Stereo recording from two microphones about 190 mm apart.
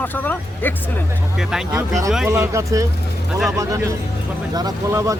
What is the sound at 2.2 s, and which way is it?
Speech, 15° right (ahead or behind).